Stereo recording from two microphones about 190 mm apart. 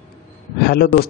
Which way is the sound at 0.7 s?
55° left (ahead or behind).